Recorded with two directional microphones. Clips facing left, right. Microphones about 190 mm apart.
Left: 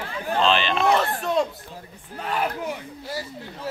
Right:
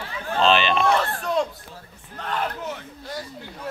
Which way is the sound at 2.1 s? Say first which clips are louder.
Left 2 dB; 10° left (ahead or behind).